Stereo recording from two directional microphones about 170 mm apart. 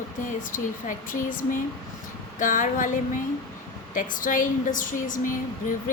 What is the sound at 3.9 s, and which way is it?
A woman's voice, 50° left (ahead or behind).